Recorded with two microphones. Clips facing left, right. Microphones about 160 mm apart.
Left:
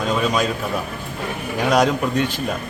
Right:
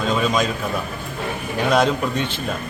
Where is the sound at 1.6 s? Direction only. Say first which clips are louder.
Left 1 dB; 10° left (ahead or behind).